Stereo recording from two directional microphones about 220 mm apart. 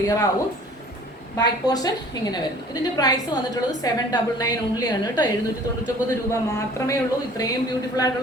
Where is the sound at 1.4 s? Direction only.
15° left (ahead or behind).